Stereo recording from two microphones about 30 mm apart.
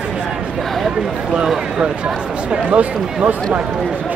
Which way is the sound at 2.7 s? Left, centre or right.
Right.